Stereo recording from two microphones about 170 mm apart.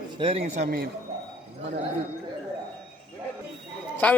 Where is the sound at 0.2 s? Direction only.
35° right (ahead or behind).